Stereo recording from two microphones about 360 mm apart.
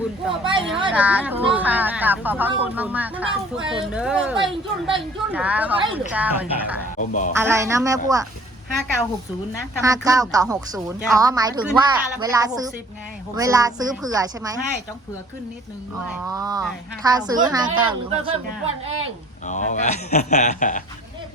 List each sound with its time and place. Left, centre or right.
0.4 s a woman's voice: centre
7.1 s speech: left
7.3 s a woman's voice: centre
9.8 s a woman's voice: centre
16.0 s a woman's voice: centre
19.5 s speech: centre